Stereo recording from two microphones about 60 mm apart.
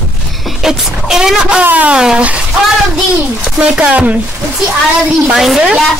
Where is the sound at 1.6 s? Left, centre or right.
Right.